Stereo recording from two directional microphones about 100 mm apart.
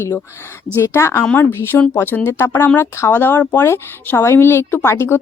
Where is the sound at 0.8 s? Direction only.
25° left (ahead or behind).